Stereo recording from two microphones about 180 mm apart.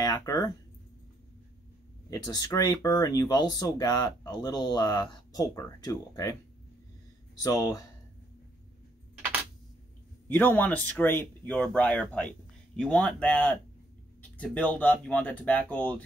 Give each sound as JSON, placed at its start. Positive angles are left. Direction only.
{"t": 0.0, "sound": "speech", "side_deg": 20}
{"t": 2.0, "sound": "speech", "side_deg": 20}
{"t": 7.4, "sound": "speech", "side_deg": 20}
{"t": 10.3, "sound": "speech", "side_deg": 10}